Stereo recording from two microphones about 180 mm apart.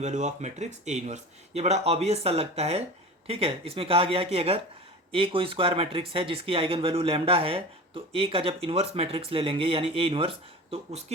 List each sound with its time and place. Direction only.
0.0 s speech: 40° right (ahead or behind)